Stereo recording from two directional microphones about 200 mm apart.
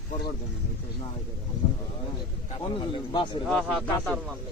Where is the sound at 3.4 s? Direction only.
Centre (ahead or behind).